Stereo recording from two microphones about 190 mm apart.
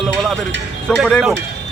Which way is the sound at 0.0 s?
Centre (ahead or behind).